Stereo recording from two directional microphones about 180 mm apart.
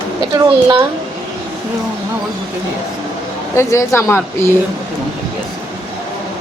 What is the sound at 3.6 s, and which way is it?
Speech, 15° left (ahead or behind).